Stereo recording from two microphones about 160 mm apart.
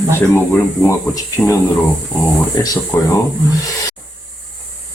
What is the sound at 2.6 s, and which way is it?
Speech, 25° left (ahead or behind).